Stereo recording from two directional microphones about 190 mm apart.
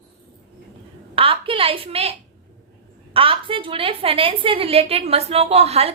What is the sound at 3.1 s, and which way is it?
A woman's voice, 30° right (ahead or behind).